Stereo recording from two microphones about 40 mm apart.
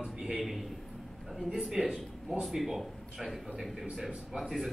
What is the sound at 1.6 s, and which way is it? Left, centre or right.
Speech, centre.